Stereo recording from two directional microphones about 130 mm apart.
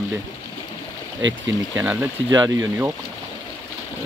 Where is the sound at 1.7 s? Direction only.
15° right (ahead or behind).